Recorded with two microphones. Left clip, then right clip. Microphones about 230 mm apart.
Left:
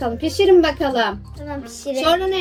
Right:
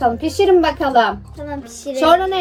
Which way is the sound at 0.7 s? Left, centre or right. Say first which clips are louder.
Right 5 dB; right.